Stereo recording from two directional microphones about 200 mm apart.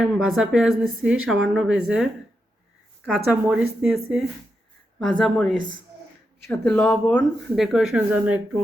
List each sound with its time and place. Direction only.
0.0 s a woman's voice: centre (ahead or behind)
3.1 s a woman's voice: 5° right (ahead or behind)